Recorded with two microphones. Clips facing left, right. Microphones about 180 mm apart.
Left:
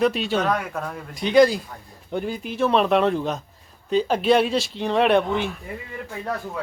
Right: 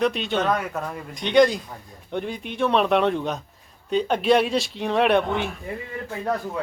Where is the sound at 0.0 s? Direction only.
5° left (ahead or behind).